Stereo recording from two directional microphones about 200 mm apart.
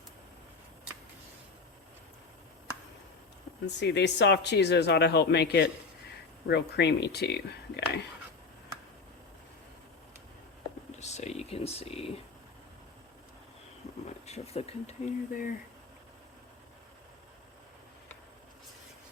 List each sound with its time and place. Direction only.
3.7 s speech: 60° left (ahead or behind)
11.0 s a sound: 35° left (ahead or behind)
14.3 s speech: 30° left (ahead or behind)